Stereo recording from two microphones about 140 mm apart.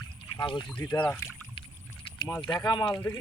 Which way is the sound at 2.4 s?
30° left (ahead or behind).